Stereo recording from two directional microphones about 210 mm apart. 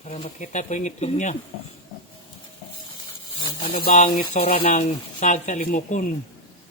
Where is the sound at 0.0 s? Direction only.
30° left (ahead or behind).